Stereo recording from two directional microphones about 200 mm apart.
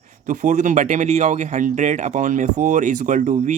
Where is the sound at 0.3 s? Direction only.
40° right (ahead or behind).